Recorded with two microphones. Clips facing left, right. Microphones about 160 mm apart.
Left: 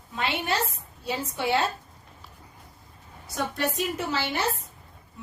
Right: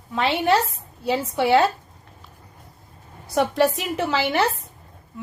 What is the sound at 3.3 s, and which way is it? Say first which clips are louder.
A woman's voice: right 9 dB; 80° right.